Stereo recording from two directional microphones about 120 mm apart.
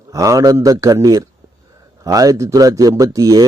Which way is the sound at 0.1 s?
25° right (ahead or behind).